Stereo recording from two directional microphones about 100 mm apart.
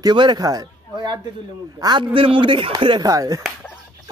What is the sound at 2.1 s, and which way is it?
Speech, 60° right (ahead or behind).